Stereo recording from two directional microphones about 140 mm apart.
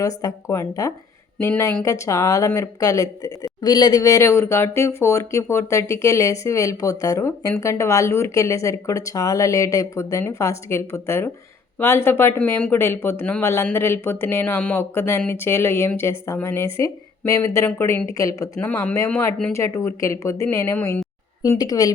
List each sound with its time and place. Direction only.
0.0 s speech: 25° left (ahead or behind); by 19.5 s 5° left (ahead or behind)
19.5 s speech: 20° left (ahead or behind)